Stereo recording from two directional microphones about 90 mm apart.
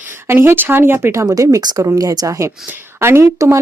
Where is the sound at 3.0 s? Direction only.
30° right (ahead or behind).